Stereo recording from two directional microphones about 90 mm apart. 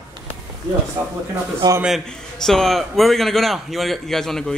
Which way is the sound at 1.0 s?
40° right (ahead or behind).